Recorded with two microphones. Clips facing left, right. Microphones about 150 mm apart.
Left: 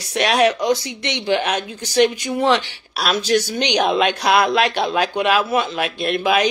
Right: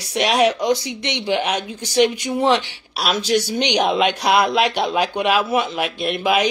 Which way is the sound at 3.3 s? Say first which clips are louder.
Even; 15° right (ahead or behind).